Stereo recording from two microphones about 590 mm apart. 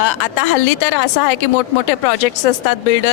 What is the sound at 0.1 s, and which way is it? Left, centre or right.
Speech, left.